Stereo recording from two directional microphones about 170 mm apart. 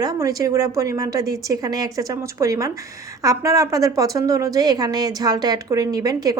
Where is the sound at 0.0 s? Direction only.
20° right (ahead or behind).